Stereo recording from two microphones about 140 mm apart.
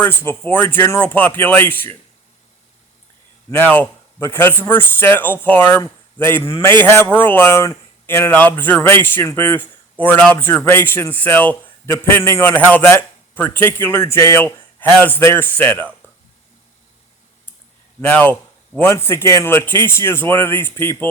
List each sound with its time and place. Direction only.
0.0 s speech: 15° left (ahead or behind)
3.6 s speech: 15° left (ahead or behind)
18.0 s speech: 10° left (ahead or behind)